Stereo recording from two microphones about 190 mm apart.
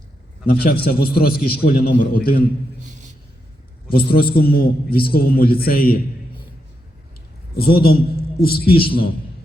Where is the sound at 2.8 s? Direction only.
40° right (ahead or behind).